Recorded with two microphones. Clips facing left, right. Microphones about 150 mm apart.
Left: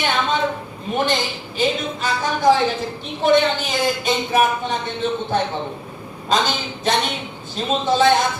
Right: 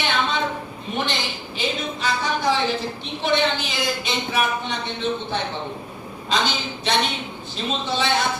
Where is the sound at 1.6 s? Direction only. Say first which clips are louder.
Left 5 dB; 45° left (ahead or behind).